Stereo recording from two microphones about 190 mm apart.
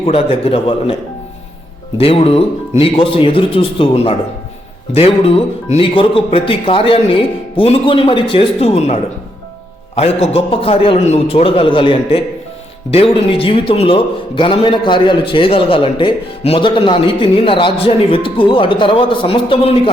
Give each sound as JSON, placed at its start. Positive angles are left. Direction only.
{"t": 0.0, "sound": "a man's voice", "side_deg": 30}
{"t": 2.0, "sound": "a man's voice", "side_deg": 30}